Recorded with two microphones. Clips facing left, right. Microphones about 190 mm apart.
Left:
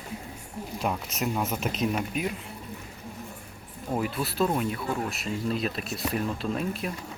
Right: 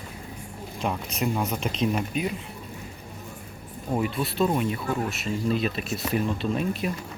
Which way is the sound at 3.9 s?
Centre (ahead or behind).